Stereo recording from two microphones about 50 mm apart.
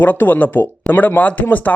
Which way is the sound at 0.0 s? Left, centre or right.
Left.